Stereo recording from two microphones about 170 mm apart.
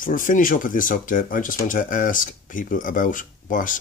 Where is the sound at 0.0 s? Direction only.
50° left (ahead or behind).